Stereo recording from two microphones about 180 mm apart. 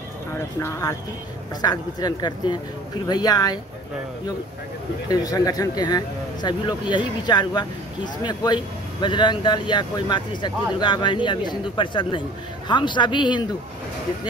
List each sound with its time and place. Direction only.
0.3 s speech: 15° left (ahead or behind)
5.1 s speech: 20° left (ahead or behind)